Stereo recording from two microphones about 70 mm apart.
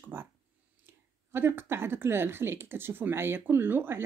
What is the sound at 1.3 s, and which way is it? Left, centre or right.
Speech, right.